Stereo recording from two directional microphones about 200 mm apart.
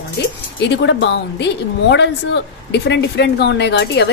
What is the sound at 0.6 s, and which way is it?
A woman's voice, 60° left (ahead or behind).